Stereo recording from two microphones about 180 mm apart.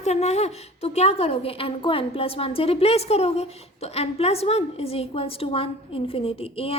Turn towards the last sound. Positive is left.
turn(degrees=30)  # may be behind; listen again after turning